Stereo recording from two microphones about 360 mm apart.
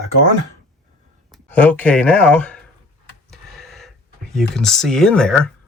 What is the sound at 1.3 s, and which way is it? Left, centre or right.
Speech, centre.